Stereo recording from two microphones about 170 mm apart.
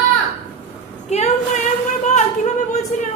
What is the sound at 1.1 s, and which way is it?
Speech, 40° left (ahead or behind).